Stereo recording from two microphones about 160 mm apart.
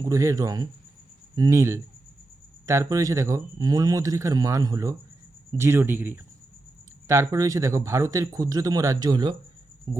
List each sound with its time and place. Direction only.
0.0 s speech: 20° right (ahead or behind)